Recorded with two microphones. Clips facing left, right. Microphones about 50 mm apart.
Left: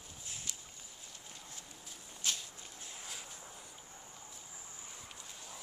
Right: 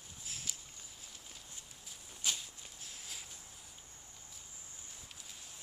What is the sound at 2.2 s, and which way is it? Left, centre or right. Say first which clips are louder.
Walk: even; centre.